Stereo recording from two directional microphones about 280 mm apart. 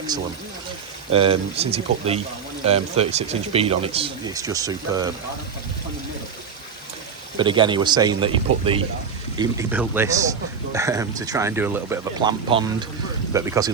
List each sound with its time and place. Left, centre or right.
1.1 s speech: centre
7.3 s speech: centre